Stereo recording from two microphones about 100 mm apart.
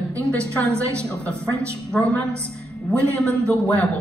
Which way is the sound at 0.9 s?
15° left (ahead or behind).